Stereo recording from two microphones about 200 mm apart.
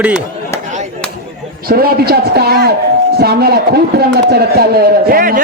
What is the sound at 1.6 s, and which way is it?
Speech, 50° right (ahead or behind).